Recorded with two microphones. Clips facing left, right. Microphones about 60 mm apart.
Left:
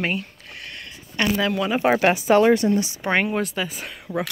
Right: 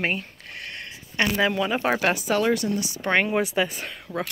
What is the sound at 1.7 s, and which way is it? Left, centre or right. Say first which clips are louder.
Speech: left 4 dB; centre.